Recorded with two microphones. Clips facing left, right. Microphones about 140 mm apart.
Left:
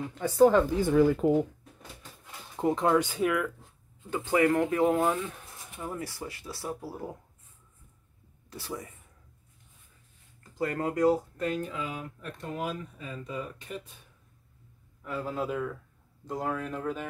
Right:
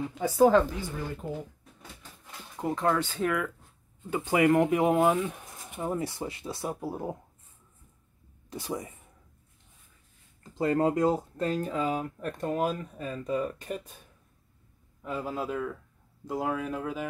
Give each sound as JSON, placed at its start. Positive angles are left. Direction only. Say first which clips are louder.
{"t": 0.1, "sound": "speech", "louder": "left 1 dB", "side_deg": -10}
{"t": 1.2, "sound": "speech", "louder": "left 12 dB", "side_deg": 90}
{"t": 2.5, "sound": "speech", "louder": "left 3 dB", "side_deg": 20}
{"t": 4.1, "sound": "speech", "louder": "right 1 dB", "side_deg": -15}
{"t": 8.5, "sound": "speech", "louder": "right 4 dB", "side_deg": -20}
{"t": 10.4, "sound": "speech", "louder": "right 5 dB", "side_deg": -25}
{"t": 15.0, "sound": "a man's voice", "louder": "right 1 dB", "side_deg": -15}
{"t": 15.3, "sound": "speech", "louder": "even", "side_deg": 0}